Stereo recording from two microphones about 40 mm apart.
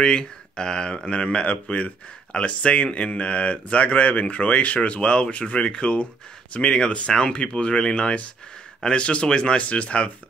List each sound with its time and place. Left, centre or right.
0.0 s speech: centre